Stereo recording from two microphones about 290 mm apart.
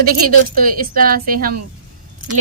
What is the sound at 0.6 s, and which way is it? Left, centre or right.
Speech, right.